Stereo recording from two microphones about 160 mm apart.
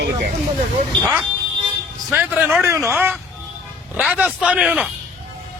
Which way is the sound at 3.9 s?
5° right (ahead or behind).